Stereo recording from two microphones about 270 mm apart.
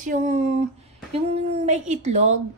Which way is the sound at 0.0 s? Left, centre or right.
Right.